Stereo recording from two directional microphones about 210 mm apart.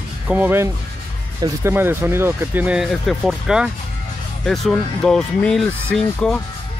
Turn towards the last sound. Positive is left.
turn(degrees=5)  # may be behind; listen again after turning